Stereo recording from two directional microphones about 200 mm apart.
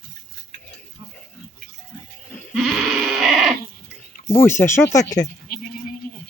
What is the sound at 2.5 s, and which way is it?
Sheep, centre (ahead or behind).